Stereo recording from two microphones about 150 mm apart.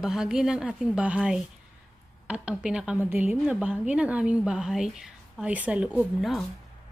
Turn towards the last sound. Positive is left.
turn(degrees=0)  # may be behind; listen again after turning